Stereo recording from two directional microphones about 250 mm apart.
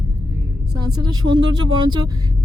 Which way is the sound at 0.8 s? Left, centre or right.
Centre.